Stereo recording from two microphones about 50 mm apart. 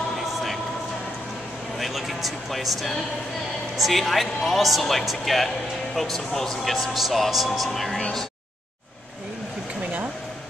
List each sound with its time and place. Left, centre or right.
1.8 s speech: centre